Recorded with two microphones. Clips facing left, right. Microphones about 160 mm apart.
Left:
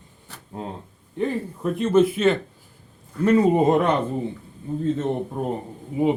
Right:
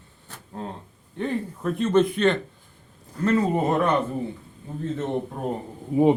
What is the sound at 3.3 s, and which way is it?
Speech, 15° left (ahead or behind).